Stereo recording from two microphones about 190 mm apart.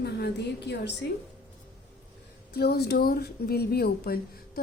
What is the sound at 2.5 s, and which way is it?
Speech, 55° left (ahead or behind).